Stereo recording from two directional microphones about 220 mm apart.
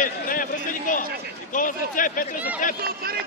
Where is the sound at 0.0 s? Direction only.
40° left (ahead or behind).